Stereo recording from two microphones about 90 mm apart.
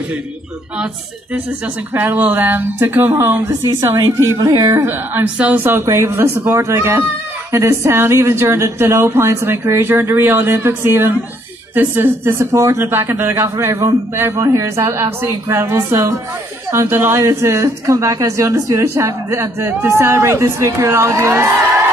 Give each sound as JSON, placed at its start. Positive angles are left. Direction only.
{"t": 2.0, "sound": "speech", "side_deg": -20}
{"t": 3.4, "sound": "a woman's voice", "side_deg": -35}
{"t": 4.8, "sound": "a woman's voice", "side_deg": -20}